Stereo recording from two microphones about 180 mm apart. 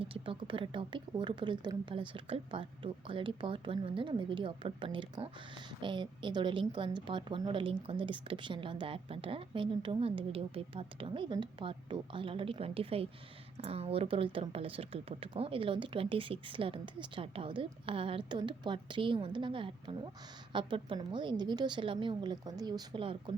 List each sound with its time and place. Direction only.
0.0 s a woman's voice: 30° right (ahead or behind)